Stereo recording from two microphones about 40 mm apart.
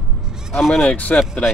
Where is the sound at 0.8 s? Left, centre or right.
Left.